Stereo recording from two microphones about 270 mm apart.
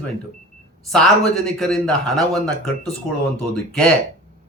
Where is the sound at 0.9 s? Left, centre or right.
Centre.